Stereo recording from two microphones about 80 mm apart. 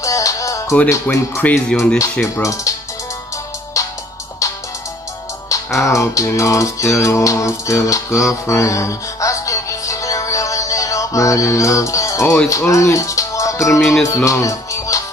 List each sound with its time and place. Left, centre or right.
0.0 s music: left
1.1 s speech: left
2.3 s speech: left
3.8 s music: left
5.5 s music: left
12.4 s speech: left
14.0 s music: left